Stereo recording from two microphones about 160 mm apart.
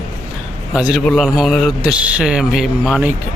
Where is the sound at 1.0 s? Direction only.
5° left (ahead or behind).